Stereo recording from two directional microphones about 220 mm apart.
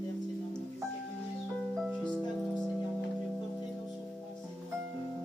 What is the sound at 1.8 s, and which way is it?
Music, 5° left (ahead or behind).